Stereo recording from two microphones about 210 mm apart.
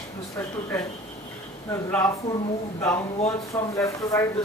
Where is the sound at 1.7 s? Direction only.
10° left (ahead or behind).